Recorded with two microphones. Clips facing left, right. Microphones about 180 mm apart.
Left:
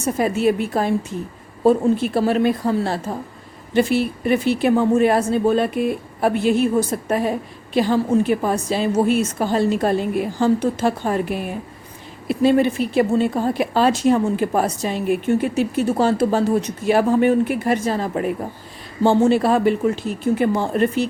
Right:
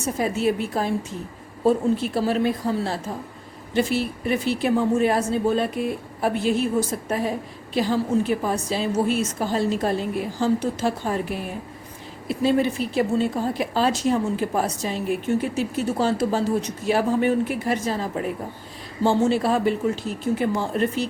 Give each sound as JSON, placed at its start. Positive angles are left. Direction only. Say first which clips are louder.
{"t": 0.0, "sound": "speech", "louder": "left 4 dB", "side_deg": 60}